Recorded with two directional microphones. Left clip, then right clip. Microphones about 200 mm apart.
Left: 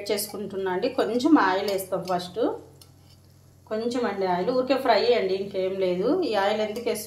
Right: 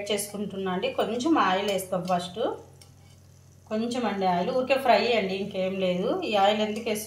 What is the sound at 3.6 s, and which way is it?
A woman's voice, 25° left (ahead or behind).